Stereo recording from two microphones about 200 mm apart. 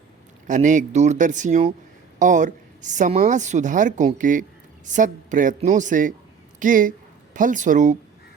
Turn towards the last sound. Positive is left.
turn(degrees=-40)  # may be behind; listen again after turning